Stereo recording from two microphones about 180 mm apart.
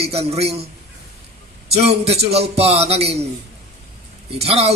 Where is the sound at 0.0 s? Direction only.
35° right (ahead or behind).